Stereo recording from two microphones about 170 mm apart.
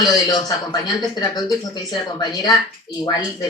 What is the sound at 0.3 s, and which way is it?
Speech, 20° left (ahead or behind).